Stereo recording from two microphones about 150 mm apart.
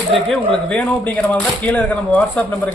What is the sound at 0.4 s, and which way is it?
A man's voice, 10° left (ahead or behind).